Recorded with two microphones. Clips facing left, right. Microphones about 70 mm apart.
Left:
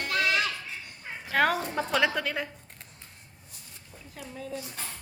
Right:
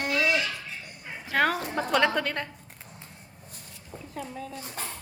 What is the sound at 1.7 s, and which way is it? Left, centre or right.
Speech, centre.